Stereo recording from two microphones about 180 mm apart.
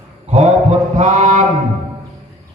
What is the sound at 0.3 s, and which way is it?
Mantra, 40° right (ahead or behind).